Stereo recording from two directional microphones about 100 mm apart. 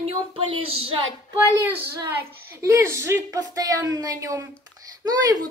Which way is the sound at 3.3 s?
40° right (ahead or behind).